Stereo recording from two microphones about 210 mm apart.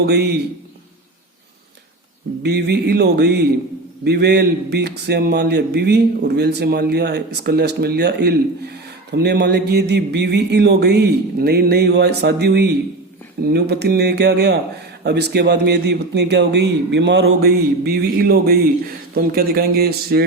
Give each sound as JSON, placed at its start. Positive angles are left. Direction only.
{"t": 0.0, "sound": "a man's voice", "side_deg": -50}
{"t": 2.4, "sound": "a man's voice", "side_deg": -50}